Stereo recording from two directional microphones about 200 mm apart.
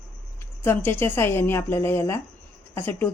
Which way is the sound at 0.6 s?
10° left (ahead or behind).